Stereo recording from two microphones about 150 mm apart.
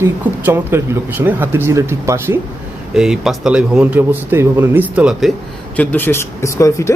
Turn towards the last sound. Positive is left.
turn(degrees=20)  # may be behind; listen again after turning